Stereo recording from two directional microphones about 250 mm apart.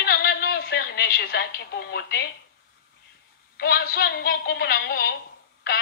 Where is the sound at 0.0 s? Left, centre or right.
Left.